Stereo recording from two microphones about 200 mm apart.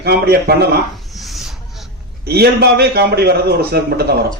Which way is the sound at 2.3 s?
55° right (ahead or behind).